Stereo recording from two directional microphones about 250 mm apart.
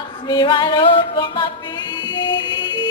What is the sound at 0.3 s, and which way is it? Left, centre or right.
Music, centre.